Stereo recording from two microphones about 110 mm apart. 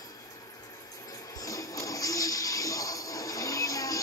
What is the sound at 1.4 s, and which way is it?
Music, 30° left (ahead or behind).